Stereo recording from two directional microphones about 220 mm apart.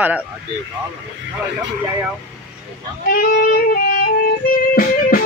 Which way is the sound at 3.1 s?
40° left (ahead or behind).